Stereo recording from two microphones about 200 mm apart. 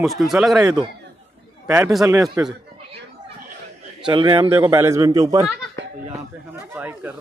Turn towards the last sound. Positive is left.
turn(degrees=-10)  # may be behind; listen again after turning